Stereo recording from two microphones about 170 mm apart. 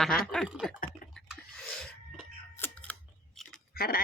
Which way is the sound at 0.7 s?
55° left (ahead or behind).